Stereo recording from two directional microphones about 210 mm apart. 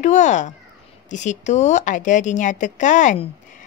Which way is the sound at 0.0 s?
35° left (ahead or behind).